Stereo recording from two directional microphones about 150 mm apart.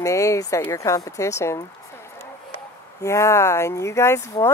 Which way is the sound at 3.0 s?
20° left (ahead or behind).